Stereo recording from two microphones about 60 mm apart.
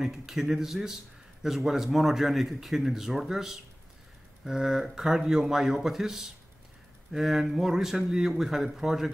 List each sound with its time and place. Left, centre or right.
0.0 s a man's voice: centre